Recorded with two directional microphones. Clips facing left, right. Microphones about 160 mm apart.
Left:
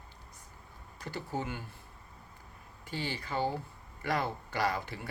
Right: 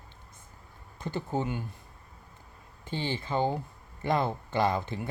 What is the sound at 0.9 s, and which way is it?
Speech, 25° right (ahead or behind).